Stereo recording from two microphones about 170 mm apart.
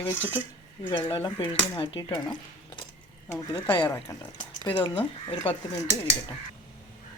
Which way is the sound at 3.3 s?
10° left (ahead or behind).